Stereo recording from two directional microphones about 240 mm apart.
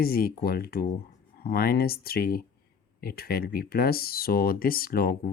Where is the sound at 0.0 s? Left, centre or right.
Left.